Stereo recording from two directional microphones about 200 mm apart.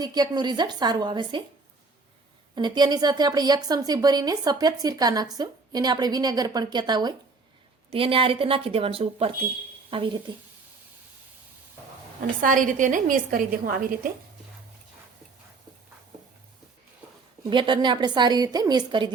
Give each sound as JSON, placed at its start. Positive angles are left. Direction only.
{"t": 0.0, "sound": "speech", "side_deg": -20}
{"t": 2.6, "sound": "speech", "side_deg": -20}
{"t": 12.4, "sound": "a woman's voice", "side_deg": -40}
{"t": 17.4, "sound": "speech", "side_deg": -25}